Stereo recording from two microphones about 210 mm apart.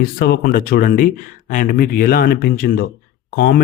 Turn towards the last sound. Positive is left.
turn(degrees=45)  # may be behind; listen again after turning